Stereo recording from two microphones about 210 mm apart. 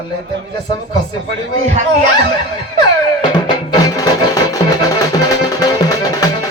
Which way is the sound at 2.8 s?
20° left (ahead or behind).